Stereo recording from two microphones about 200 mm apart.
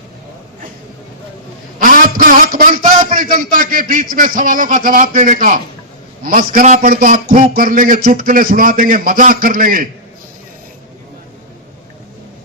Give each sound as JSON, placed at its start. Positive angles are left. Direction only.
{"t": 1.8, "sound": "a man's voice", "side_deg": -45}